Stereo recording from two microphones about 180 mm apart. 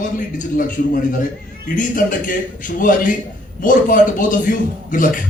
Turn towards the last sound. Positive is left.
turn(degrees=50)  # may be behind; listen again after turning